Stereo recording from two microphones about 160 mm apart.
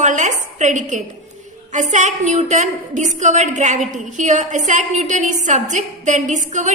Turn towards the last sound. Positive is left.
turn(degrees=-50)  # may be behind; listen again after turning